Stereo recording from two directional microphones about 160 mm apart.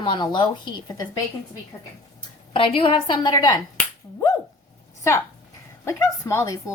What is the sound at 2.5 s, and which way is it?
Speech, 35° left (ahead or behind).